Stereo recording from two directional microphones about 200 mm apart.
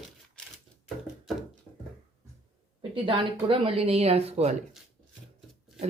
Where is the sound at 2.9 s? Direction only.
25° right (ahead or behind).